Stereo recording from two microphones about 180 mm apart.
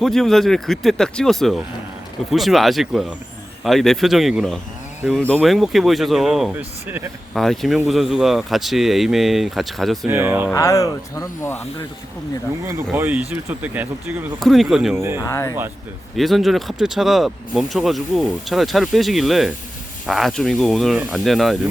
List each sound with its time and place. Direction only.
0.0 s speech: centre (ahead or behind)
7.3 s speech: centre (ahead or behind)
10.1 s speech: 10° right (ahead or behind)
10.5 s speech: 15° left (ahead or behind)
12.6 s speech: 10° right (ahead or behind)
14.9 s speech: 15° right (ahead or behind)
15.2 s speech: 15° left (ahead or behind)
16.1 s speech: centre (ahead or behind)